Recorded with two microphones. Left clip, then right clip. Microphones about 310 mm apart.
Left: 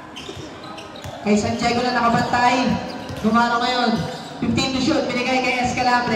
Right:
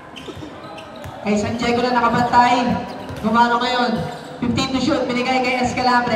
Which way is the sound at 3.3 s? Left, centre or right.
Centre.